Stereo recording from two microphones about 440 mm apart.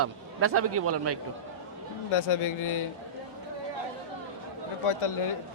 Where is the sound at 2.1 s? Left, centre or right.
Left.